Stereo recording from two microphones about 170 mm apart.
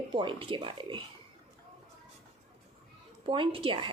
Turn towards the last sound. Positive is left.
turn(degrees=-30)  # may be behind; listen again after turning